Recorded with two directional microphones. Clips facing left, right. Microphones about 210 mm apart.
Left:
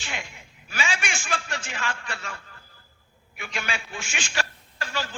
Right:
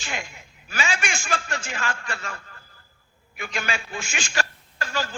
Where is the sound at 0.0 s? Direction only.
45° right (ahead or behind).